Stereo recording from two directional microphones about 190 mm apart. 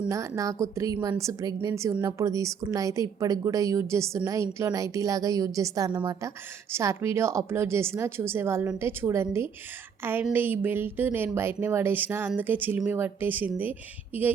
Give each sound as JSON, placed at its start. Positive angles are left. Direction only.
{"t": 0.1, "sound": "a woman's voice", "side_deg": -15}